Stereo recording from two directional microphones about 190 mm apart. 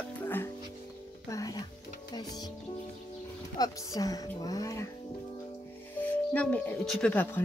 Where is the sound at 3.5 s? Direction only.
20° left (ahead or behind).